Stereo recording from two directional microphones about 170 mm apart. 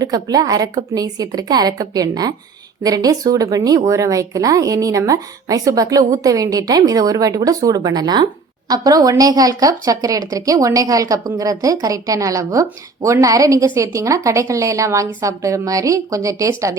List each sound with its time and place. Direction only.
0.0 s speech: 20° right (ahead or behind)